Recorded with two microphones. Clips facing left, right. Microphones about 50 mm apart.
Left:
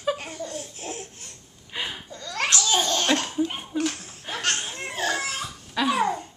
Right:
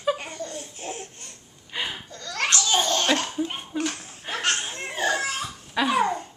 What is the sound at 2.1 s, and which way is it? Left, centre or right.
Laughter, centre.